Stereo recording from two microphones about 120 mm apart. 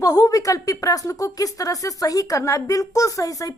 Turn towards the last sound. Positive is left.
turn(degrees=30)  # may be behind; listen again after turning